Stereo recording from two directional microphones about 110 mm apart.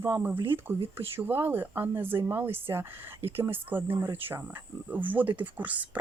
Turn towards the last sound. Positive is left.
turn(degrees=-15)  # may be behind; listen again after turning